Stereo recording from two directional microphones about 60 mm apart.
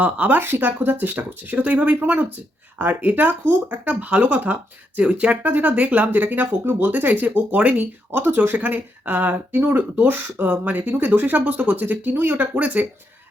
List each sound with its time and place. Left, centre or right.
0.0 s speech: right
8.1 s speech: right